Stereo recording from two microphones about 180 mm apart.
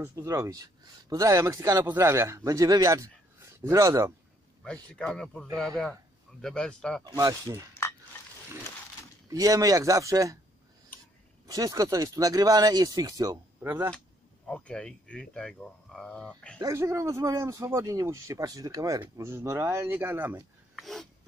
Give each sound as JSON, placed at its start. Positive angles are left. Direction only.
{"t": 0.0, "sound": "speech", "side_deg": -15}
{"t": 4.9, "sound": "speech", "side_deg": 5}
{"t": 7.1, "sound": "speech", "side_deg": -20}
{"t": 9.3, "sound": "speech", "side_deg": -20}
{"t": 11.4, "sound": "speech", "side_deg": -20}
{"t": 14.5, "sound": "speech", "side_deg": 5}
{"t": 16.5, "sound": "speech", "side_deg": -20}
{"t": 20.7, "sound": "a sound", "side_deg": 0}